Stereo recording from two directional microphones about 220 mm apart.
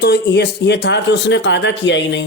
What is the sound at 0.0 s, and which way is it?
Speech, 50° left (ahead or behind).